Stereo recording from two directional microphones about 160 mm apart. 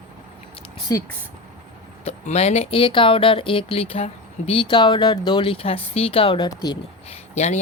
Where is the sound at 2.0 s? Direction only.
40° left (ahead or behind).